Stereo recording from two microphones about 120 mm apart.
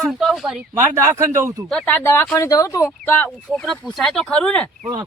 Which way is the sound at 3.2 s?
5° left (ahead or behind).